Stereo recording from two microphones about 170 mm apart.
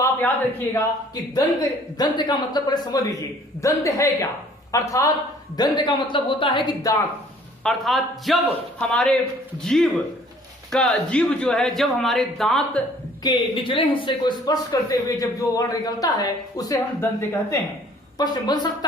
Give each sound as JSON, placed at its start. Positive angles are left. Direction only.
{"t": 0.7, "sound": "a man's voice", "side_deg": 20}
{"t": 7.6, "sound": "a man's voice", "side_deg": 0}
{"t": 13.2, "sound": "speech", "side_deg": 30}